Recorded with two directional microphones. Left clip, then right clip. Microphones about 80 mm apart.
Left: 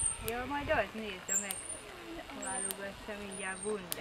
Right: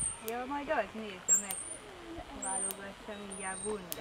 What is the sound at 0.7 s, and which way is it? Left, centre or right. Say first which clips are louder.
Speech: left 1 dB; centre.